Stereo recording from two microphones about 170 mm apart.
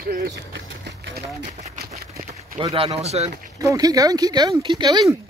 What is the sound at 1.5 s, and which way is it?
Speech, 40° right (ahead or behind).